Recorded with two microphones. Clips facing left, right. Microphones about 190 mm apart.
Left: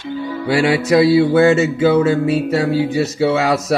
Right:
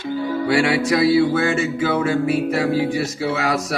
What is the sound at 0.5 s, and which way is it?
Mantra, 25° left (ahead or behind).